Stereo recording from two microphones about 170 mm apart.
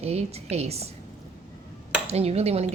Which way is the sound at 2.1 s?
35° right (ahead or behind).